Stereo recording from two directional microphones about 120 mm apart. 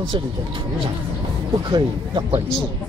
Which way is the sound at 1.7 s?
40° right (ahead or behind).